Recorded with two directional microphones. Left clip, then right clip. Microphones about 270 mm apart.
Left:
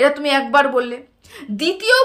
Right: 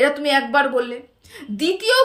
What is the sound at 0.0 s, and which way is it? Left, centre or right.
A woman's voice, centre.